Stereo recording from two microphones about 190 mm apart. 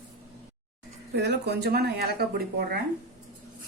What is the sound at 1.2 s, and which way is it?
Speech, 60° right (ahead or behind).